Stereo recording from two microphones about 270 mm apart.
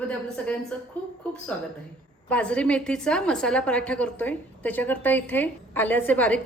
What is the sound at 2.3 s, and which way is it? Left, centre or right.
A woman's voice, centre.